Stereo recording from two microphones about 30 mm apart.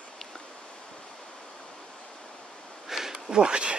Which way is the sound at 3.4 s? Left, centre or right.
Right.